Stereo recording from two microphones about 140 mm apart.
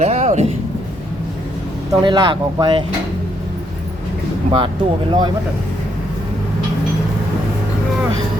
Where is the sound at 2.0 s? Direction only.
35° right (ahead or behind).